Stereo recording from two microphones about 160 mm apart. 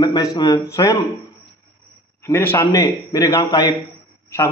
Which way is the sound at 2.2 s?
15° left (ahead or behind).